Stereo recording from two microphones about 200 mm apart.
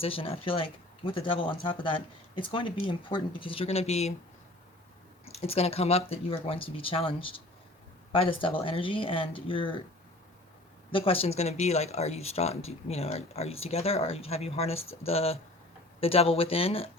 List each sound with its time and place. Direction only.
0.0 s speech: 30° left (ahead or behind)
5.3 s speech: 30° left (ahead or behind)
10.9 s speech: 30° left (ahead or behind)